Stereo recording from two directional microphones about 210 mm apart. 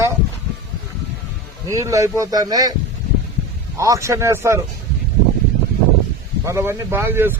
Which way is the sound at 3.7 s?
15° right (ahead or behind).